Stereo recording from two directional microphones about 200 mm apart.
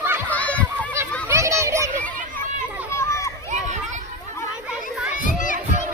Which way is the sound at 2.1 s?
40° right (ahead or behind).